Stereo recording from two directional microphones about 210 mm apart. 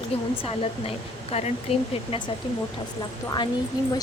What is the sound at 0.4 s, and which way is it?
Speech, 30° left (ahead or behind).